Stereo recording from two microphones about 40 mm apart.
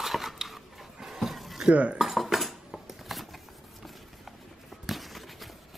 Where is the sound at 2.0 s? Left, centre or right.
Centre.